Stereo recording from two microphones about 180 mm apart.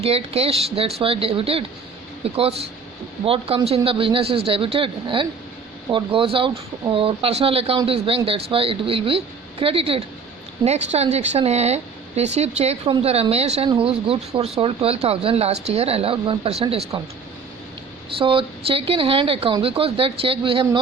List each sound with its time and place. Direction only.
0.0 s speech: 35° right (ahead or behind)
18.2 s speech: 30° right (ahead or behind)